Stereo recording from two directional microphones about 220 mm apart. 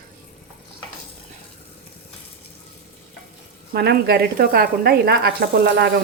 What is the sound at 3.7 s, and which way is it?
Speech, 45° right (ahead or behind).